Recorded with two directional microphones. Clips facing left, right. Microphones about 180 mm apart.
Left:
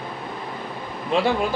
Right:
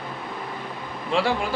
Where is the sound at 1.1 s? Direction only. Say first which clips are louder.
Left 2 dB; 20° left (ahead or behind).